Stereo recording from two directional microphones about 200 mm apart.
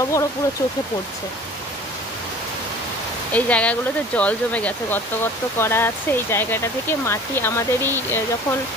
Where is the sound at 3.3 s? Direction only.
5° left (ahead or behind).